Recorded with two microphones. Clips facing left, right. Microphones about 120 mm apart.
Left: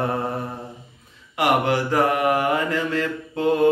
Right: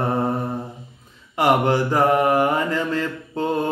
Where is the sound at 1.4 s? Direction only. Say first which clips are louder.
Right 2 dB; 35° right (ahead or behind).